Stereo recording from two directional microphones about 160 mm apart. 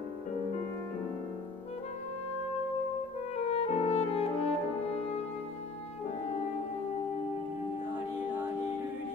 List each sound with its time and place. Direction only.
3.3 s brass instrument: 40° left (ahead or behind)